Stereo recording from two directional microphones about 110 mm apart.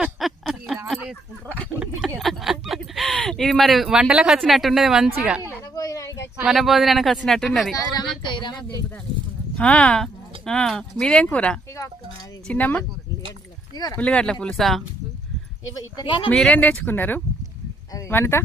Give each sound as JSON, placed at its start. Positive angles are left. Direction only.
{"t": 0.0, "sound": "a sound", "side_deg": 0}
{"t": 2.1, "sound": "speech", "side_deg": 0}
{"t": 5.7, "sound": "a sound", "side_deg": 35}
{"t": 6.3, "sound": "speech", "side_deg": -5}
{"t": 8.3, "sound": "a sound", "side_deg": 45}
{"t": 9.6, "sound": "speech", "side_deg": 10}
{"t": 13.9, "sound": "speech", "side_deg": 10}
{"t": 16.0, "sound": "speech", "side_deg": 50}
{"t": 16.3, "sound": "speech", "side_deg": 5}
{"t": 16.6, "sound": "speech", "side_deg": 15}